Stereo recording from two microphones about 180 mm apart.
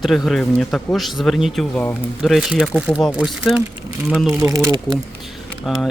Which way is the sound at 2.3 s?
Centre (ahead or behind).